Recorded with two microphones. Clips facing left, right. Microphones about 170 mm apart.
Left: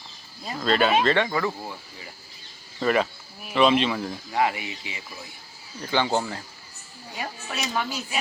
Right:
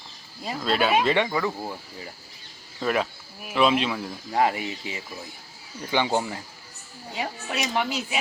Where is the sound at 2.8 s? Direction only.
Centre (ahead or behind).